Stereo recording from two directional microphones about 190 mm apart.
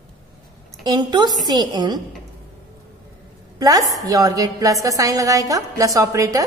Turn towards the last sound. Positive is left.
turn(degrees=-15)  # may be behind; listen again after turning